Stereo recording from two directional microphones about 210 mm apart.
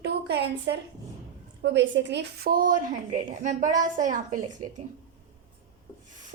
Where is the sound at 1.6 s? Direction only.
55° right (ahead or behind); by 4.4 s 35° right (ahead or behind).